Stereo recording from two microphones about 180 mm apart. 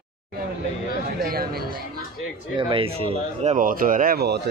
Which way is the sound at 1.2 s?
55° right (ahead or behind).